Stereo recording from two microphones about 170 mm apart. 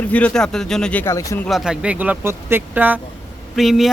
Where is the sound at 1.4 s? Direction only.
Centre (ahead or behind).